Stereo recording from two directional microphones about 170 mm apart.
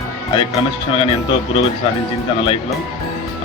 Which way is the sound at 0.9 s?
30° left (ahead or behind).